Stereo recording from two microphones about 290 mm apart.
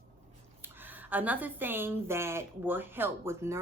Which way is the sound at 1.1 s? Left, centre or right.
Centre.